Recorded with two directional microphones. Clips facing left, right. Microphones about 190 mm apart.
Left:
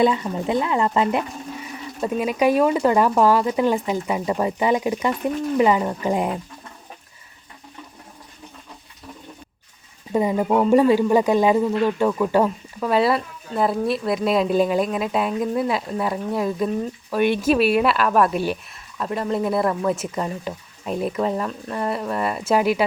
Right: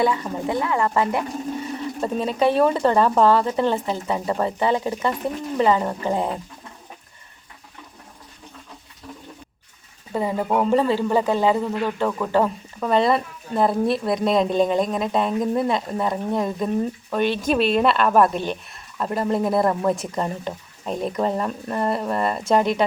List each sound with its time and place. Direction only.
0.0 s speech: 20° left (ahead or behind)
10.1 s speech: 15° left (ahead or behind)